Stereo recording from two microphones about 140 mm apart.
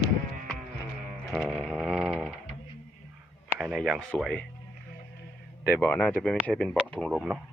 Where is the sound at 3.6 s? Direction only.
5° right (ahead or behind).